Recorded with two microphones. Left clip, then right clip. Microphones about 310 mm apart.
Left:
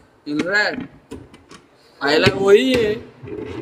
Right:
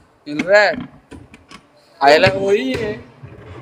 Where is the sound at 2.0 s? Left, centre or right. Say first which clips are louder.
Right 6 dB; centre.